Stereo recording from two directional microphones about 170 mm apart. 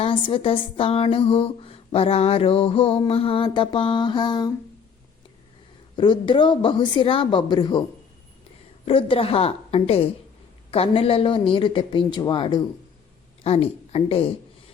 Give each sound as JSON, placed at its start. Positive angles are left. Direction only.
{"t": 0.0, "sound": "speech", "side_deg": 30}
{"t": 6.0, "sound": "speech", "side_deg": 30}